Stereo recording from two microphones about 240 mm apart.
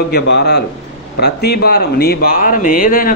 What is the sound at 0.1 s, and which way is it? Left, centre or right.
A man's voice, left.